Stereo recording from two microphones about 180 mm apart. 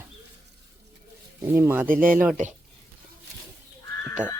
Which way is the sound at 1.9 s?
50° right (ahead or behind).